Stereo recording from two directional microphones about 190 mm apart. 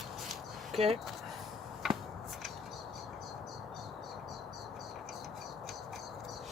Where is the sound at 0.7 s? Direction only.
30° right (ahead or behind).